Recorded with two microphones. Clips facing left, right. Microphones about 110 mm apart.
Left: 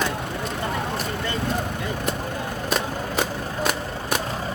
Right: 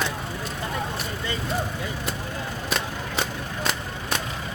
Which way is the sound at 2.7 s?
5° left (ahead or behind).